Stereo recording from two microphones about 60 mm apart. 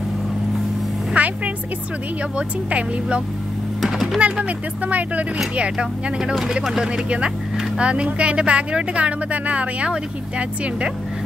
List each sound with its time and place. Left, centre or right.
1.1 s music: right
2.3 s speech: centre
3.8 s a sound: centre
4.5 s speech: right